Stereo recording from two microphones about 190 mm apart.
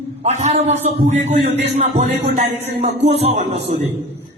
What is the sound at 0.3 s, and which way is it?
A man's voice, 35° right (ahead or behind).